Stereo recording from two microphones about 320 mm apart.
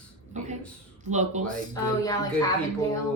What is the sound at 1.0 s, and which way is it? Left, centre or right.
Speech, right.